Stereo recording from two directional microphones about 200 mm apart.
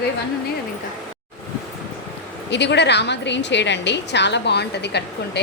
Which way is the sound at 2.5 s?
60° left (ahead or behind).